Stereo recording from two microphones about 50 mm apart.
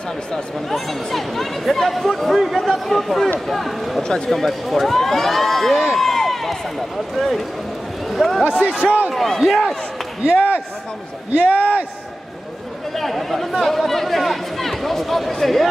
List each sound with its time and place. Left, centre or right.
0.3 s speech: centre
8.5 s a man's voice: right
9.1 s speech: centre
11.3 s a man's voice: right
12.9 s speech: centre